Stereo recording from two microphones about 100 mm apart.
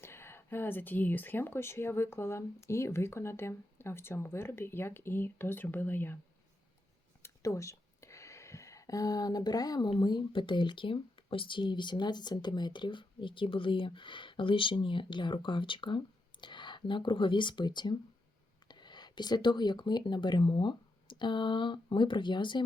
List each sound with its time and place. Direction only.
0.0 s speech: 25° left (ahead or behind)
7.2 s a sound: 30° left (ahead or behind)
9.9 s speech: 50° left (ahead or behind)